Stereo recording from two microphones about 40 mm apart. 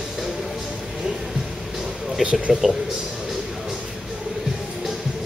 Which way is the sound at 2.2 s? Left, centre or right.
Right.